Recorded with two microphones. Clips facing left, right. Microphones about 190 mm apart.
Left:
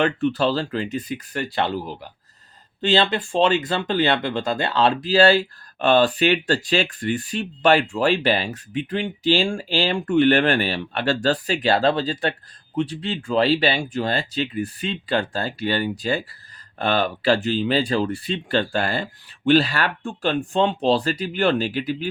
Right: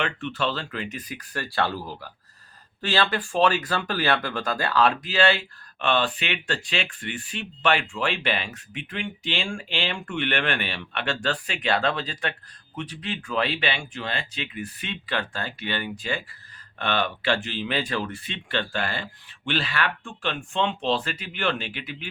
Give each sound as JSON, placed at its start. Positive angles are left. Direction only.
{"t": 0.0, "sound": "speech", "side_deg": 35}